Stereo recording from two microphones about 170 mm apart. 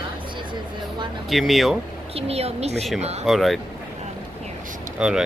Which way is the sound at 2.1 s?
35° right (ahead or behind).